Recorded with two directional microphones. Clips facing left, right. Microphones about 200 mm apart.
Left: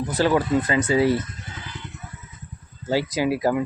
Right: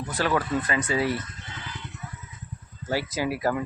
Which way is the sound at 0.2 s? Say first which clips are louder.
Left 5 dB; 30° left (ahead or behind).